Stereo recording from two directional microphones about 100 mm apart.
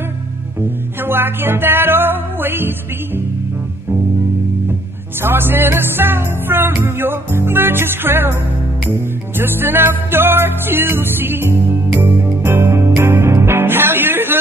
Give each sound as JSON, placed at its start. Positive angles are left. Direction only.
{"t": 0.6, "sound": "music", "side_deg": -20}
{"t": 5.2, "sound": "music", "side_deg": -20}
{"t": 9.4, "sound": "music", "side_deg": -20}